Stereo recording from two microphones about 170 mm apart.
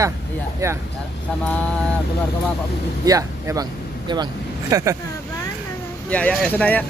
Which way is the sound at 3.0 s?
20° right (ahead or behind).